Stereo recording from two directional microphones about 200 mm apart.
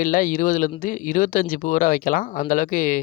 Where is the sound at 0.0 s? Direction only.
40° left (ahead or behind).